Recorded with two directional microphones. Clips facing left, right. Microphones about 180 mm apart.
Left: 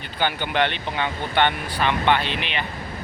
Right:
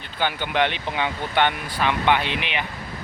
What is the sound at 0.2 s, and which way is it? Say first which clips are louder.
Speech: even; centre (ahead or behind).